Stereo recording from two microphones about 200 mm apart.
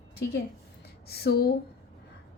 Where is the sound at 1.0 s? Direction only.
55° left (ahead or behind).